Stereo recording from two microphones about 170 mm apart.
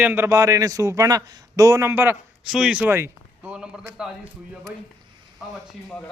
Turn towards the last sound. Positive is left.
turn(degrees=5)  # may be behind; listen again after turning